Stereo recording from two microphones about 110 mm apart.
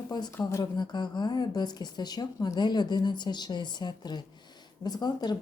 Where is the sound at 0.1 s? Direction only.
40° left (ahead or behind).